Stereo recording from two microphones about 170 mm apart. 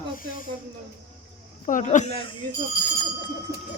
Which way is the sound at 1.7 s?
45° left (ahead or behind).